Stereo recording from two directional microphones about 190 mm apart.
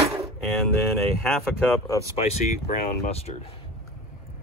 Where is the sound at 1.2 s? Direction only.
5° left (ahead or behind).